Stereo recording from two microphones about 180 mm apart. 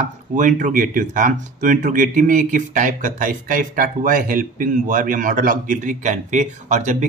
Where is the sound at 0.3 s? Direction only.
45° right (ahead or behind).